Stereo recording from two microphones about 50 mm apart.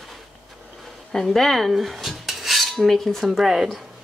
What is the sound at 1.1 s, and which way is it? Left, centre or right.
Cutlery, centre.